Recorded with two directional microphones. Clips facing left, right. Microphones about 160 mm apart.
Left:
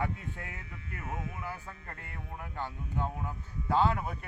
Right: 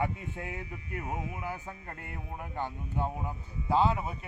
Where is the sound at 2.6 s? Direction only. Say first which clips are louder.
Right 2 dB; 15° right (ahead or behind).